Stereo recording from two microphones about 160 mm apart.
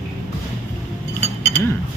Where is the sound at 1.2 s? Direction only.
45° right (ahead or behind).